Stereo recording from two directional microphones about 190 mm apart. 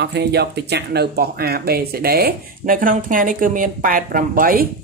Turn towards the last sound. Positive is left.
turn(degrees=-45)  # may be behind; listen again after turning